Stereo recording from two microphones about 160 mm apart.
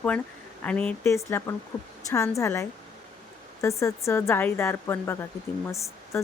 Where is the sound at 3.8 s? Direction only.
20° left (ahead or behind).